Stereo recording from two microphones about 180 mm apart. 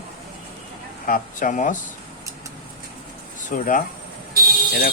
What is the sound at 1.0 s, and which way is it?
Speech, 45° left (ahead or behind).